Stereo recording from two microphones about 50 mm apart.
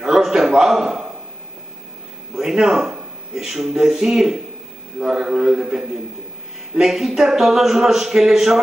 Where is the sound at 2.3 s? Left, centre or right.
Centre.